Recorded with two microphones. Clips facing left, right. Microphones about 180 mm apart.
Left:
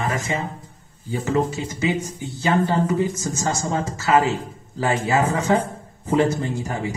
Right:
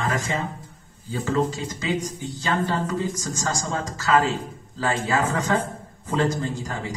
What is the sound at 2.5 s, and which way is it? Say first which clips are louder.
Speech: left 5 dB; 15° left (ahead or behind).